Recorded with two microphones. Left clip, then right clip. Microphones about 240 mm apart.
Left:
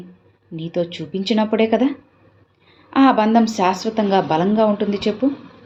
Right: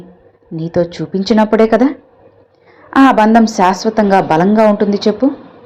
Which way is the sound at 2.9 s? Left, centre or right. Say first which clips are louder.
Right 6 dB; right.